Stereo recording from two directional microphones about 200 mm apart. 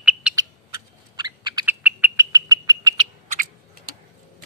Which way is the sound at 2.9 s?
40° right (ahead or behind).